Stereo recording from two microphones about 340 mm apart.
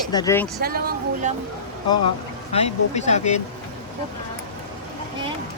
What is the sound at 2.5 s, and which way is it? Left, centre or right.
Speech, centre.